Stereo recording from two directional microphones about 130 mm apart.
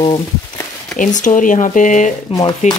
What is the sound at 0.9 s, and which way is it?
Speech, 75° left (ahead or behind).